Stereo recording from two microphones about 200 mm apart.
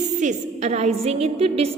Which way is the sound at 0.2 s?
35° right (ahead or behind).